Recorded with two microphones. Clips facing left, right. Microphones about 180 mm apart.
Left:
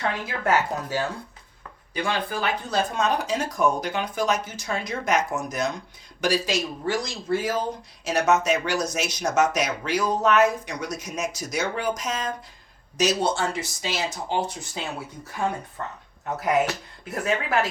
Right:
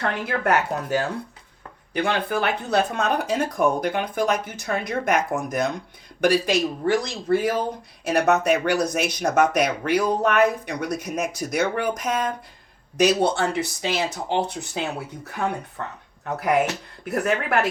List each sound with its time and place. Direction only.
0.0 s speech: 60° right (ahead or behind)
17.1 s speech: 60° right (ahead or behind)